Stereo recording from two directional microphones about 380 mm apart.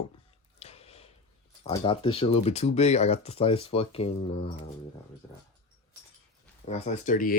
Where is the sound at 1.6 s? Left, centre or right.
Centre.